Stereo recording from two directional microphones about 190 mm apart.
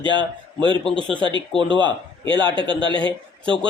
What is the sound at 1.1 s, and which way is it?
A man's voice, 25° right (ahead or behind).